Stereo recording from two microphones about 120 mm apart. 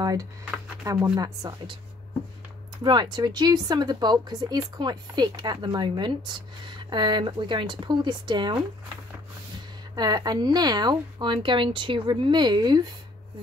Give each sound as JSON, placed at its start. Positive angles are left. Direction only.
{"t": 0.0, "sound": "speech", "side_deg": -30}
{"t": 2.8, "sound": "speech", "side_deg": -35}
{"t": 9.9, "sound": "speech", "side_deg": -35}